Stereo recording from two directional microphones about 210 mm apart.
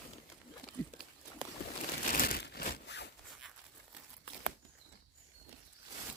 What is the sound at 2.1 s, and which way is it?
Crushing, 45° left (ahead or behind).